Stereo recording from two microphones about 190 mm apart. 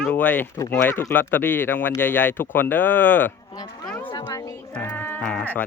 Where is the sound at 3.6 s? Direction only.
20° left (ahead or behind).